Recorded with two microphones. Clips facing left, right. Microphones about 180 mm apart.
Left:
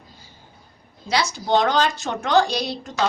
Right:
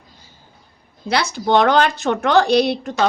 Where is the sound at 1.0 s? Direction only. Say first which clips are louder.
Right 4 dB; 60° right (ahead or behind).